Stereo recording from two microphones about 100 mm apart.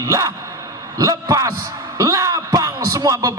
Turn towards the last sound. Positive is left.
turn(degrees=-35)  # may be behind; listen again after turning